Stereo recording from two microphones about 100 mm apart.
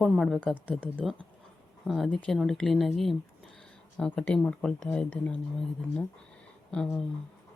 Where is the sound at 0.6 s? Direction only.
10° left (ahead or behind).